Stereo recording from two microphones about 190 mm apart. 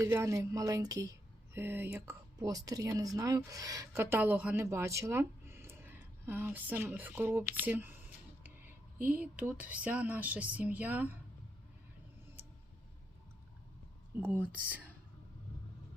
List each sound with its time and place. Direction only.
0.0 s speech: 15° right (ahead or behind)
12.4 s a sound: 10° right (ahead or behind)
14.2 s speech: 10° right (ahead or behind)